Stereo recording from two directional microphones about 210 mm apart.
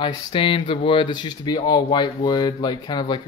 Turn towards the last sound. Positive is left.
turn(degrees=20)  # may be behind; listen again after turning